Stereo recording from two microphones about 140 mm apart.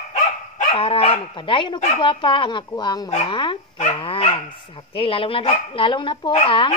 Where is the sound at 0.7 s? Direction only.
40° left (ahead or behind).